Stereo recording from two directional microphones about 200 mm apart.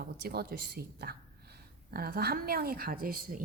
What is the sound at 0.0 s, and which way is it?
A woman's voice, 50° right (ahead or behind).